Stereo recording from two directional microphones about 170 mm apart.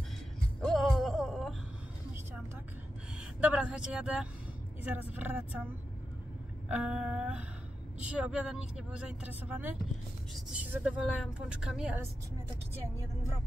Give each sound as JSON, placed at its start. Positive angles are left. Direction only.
{"t": 0.7, "sound": "a sound", "side_deg": 0}
{"t": 3.2, "sound": "speech", "side_deg": -5}
{"t": 6.7, "sound": "speech", "side_deg": -5}
{"t": 12.9, "sound": "speech", "side_deg": -20}